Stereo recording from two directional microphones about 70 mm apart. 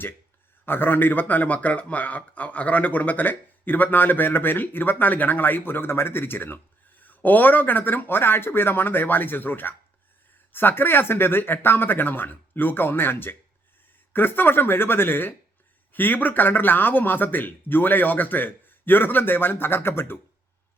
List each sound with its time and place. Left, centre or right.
0.6 s a man's voice: left